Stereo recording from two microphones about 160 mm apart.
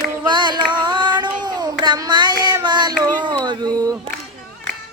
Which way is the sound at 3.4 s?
25° right (ahead or behind).